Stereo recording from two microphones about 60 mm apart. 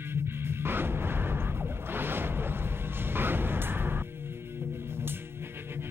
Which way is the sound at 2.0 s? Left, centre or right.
Right.